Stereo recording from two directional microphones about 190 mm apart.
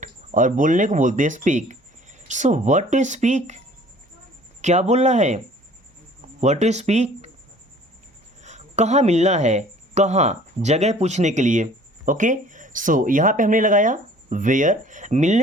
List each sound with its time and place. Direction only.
0.0 s speech: 40° right (ahead or behind)
4.6 s speech: 35° right (ahead or behind)
6.4 s speech: 35° right (ahead or behind)
8.4 s speech: 40° right (ahead or behind)